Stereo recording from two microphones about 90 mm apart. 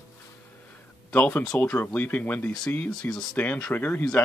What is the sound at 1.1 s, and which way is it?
Speech, 20° left (ahead or behind).